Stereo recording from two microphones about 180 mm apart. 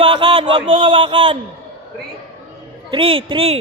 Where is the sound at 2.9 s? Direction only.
30° right (ahead or behind).